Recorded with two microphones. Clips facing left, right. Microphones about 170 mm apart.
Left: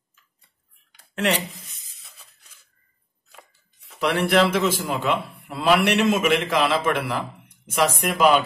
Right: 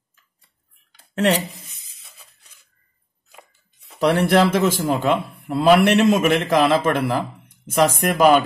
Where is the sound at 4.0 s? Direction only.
40° right (ahead or behind).